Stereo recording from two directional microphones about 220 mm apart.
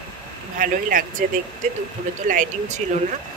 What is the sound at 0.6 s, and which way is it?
Speech, 40° right (ahead or behind).